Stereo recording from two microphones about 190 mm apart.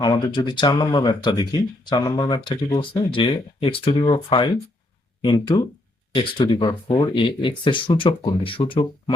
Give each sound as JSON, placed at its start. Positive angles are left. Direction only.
{"t": 0.0, "sound": "speech", "side_deg": 25}